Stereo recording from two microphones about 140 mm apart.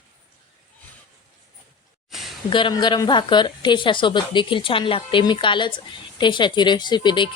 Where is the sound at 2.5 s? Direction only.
35° left (ahead or behind).